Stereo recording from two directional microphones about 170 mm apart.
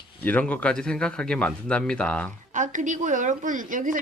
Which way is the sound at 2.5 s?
45° right (ahead or behind).